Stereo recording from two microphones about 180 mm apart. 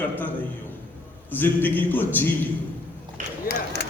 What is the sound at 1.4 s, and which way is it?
A man's voice, 10° left (ahead or behind).